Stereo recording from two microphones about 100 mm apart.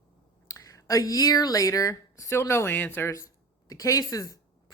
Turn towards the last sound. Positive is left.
turn(degrees=35)  # may be behind; listen again after turning